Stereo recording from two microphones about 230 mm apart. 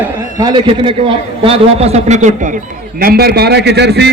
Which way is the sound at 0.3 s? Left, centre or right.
Centre.